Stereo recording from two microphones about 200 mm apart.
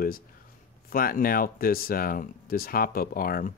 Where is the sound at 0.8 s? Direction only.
45° left (ahead or behind).